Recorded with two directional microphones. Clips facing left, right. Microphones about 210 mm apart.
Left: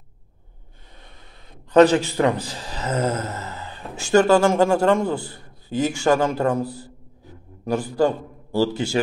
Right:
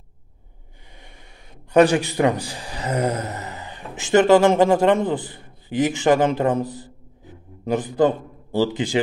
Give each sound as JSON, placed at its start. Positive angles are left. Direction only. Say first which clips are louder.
{"t": 1.7, "sound": "a man's voice", "louder": "left 1 dB", "side_deg": -15}